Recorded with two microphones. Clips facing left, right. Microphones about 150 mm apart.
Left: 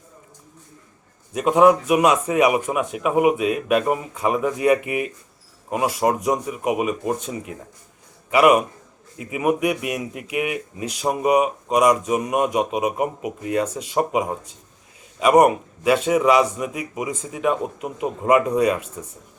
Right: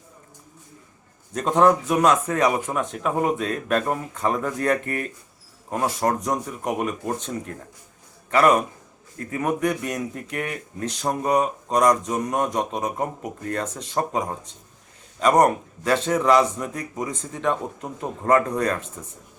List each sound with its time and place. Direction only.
1.3 s speech: 5° left (ahead or behind)